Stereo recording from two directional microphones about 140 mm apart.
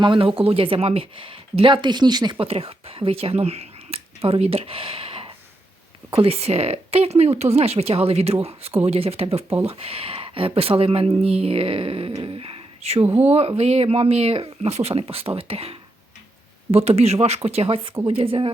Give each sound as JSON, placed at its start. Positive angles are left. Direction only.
{"t": 0.0, "sound": "speech", "side_deg": -35}
{"t": 2.4, "sound": "speech", "side_deg": -45}
{"t": 12.2, "sound": "a sound", "side_deg": -40}
{"t": 13.1, "sound": "speech", "side_deg": -10}
{"t": 13.6, "sound": "speech", "side_deg": -45}